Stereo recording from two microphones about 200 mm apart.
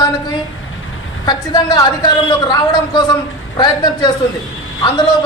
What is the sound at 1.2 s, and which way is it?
A man's voice, 20° left (ahead or behind).